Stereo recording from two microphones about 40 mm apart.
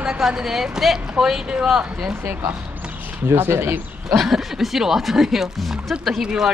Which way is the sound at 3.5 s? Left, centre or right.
Right.